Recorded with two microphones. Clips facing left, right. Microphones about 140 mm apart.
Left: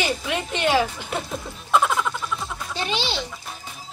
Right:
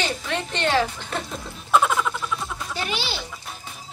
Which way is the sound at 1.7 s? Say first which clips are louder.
Right 1 dB; centre (ahead or behind).